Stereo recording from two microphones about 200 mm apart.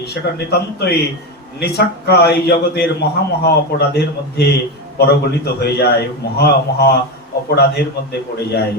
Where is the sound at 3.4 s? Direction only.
55° left (ahead or behind).